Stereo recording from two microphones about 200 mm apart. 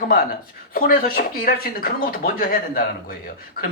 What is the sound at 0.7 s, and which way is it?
Speech, 45° left (ahead or behind).